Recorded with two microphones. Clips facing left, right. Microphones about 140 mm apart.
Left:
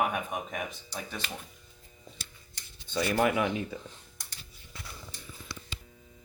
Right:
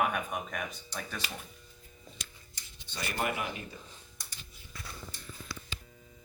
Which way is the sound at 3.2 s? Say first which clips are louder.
Left 6 dB; 90° left.